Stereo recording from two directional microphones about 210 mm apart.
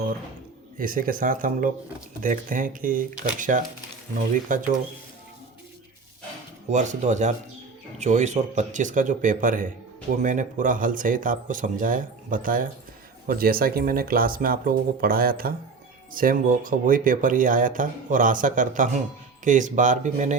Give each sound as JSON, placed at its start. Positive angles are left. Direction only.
{"t": 0.8, "sound": "speech", "side_deg": -40}
{"t": 6.7, "sound": "speech", "side_deg": -35}